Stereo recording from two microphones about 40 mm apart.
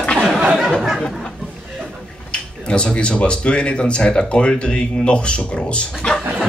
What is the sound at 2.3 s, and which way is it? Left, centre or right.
A man's voice, left.